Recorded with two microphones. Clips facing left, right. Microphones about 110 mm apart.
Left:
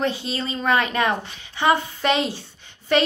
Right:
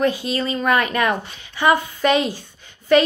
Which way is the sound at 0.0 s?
30° left (ahead or behind).